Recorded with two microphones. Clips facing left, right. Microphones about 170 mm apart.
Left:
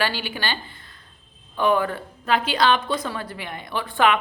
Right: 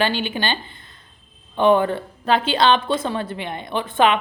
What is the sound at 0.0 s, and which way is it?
A woman's voice, 20° right (ahead or behind).